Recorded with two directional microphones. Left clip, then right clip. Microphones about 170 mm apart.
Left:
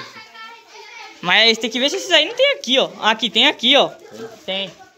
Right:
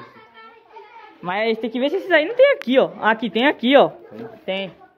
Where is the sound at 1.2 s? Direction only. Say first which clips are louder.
Left 7 dB; 5° right (ahead or behind); by 4.6 s 30° right (ahead or behind).